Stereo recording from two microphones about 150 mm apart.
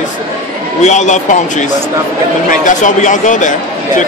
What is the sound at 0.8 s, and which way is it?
Speech, 55° left (ahead or behind).